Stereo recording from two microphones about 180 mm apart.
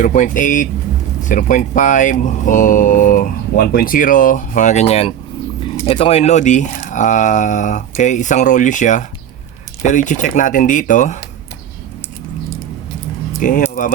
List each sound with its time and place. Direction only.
0.0 s speech: 45° left (ahead or behind)
13.4 s speech: 45° left (ahead or behind)